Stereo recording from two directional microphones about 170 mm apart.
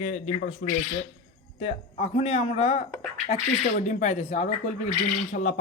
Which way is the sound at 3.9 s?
45° left (ahead or behind).